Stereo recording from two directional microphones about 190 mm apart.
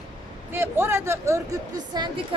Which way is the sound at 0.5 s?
10° right (ahead or behind).